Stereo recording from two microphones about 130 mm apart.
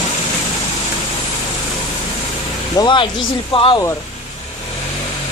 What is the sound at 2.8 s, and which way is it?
Speech, 40° left (ahead or behind).